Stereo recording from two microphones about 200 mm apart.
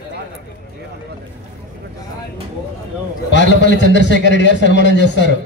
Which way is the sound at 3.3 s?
60° left (ahead or behind).